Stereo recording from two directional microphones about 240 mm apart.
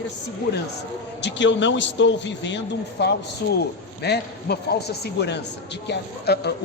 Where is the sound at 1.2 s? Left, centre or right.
Left.